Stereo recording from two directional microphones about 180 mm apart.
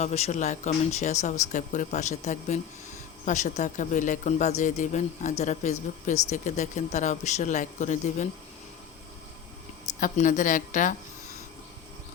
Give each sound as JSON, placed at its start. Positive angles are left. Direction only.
{"t": 0.0, "sound": "speech", "side_deg": 40}
{"t": 10.0, "sound": "a woman's voice", "side_deg": 45}